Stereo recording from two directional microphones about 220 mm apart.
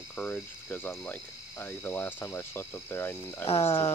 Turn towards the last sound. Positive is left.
turn(degrees=25)  # may be behind; listen again after turning